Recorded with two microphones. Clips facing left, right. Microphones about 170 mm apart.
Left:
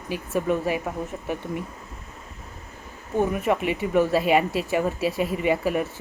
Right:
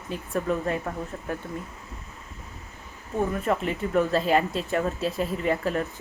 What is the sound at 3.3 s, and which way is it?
Speech, 10° left (ahead or behind).